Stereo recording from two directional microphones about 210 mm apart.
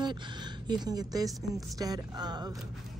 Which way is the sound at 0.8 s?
20° right (ahead or behind).